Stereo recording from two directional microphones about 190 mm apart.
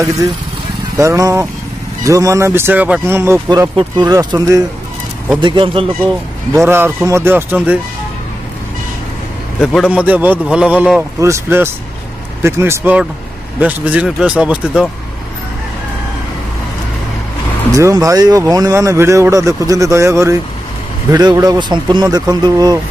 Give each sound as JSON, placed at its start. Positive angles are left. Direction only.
{"t": 0.9, "sound": "a man's voice", "side_deg": -15}
{"t": 6.5, "sound": "a man's voice", "side_deg": -15}
{"t": 9.7, "sound": "a man's voice", "side_deg": -5}
{"t": 17.7, "sound": "a man's voice", "side_deg": -15}